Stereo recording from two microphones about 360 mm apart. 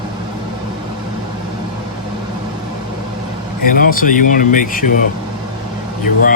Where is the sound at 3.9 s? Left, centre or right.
Left.